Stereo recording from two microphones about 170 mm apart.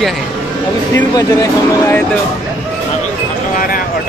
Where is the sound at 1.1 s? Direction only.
15° left (ahead or behind).